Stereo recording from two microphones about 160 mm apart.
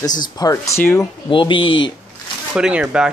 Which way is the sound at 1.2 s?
30° left (ahead or behind).